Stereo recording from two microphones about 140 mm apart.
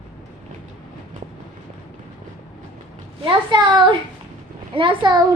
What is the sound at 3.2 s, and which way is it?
A child's voice, 35° right (ahead or behind).